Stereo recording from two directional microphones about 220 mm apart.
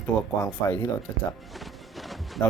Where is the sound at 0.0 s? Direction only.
10° left (ahead or behind).